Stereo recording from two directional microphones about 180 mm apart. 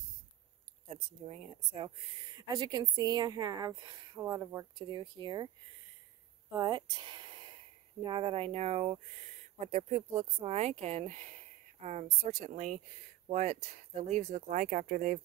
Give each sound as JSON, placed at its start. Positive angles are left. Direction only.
{"t": 1.2, "sound": "a woman's voice", "side_deg": -30}
{"t": 6.5, "sound": "speech", "side_deg": -25}